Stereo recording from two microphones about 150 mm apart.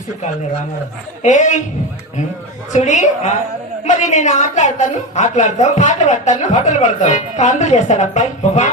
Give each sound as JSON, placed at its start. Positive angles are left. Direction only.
{"t": 1.2, "sound": "a woman's voice", "side_deg": 55}
{"t": 2.7, "sound": "a woman's voice", "side_deg": 55}